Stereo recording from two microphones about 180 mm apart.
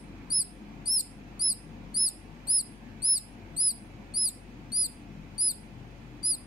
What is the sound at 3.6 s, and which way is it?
Mouse, 20° left (ahead or behind).